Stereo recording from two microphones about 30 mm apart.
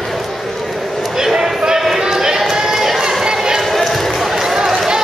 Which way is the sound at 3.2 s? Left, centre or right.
Centre.